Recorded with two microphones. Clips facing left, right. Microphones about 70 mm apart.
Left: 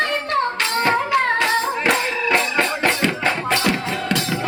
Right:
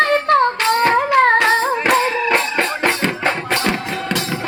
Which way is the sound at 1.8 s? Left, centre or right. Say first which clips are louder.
Right 4 dB; right.